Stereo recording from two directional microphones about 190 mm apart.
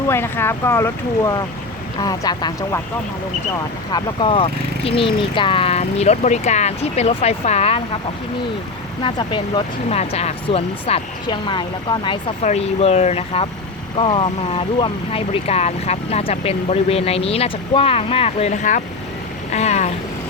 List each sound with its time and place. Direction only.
0.1 s speech: 10° left (ahead or behind)
3.9 s speech: 25° left (ahead or behind)
9.0 s speech: 25° left (ahead or behind)